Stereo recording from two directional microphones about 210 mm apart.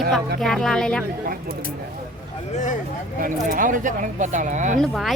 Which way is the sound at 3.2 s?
40° right (ahead or behind).